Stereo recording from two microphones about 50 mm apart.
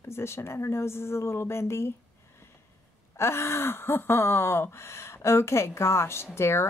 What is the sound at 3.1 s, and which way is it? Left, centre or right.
Speech, left.